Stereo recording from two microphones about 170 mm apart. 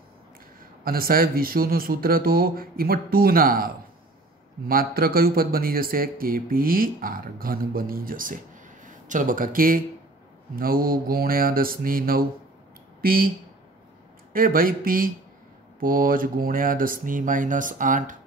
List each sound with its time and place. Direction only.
0.8 s speech: 60° right (ahead or behind)
14.3 s speech: 55° right (ahead or behind)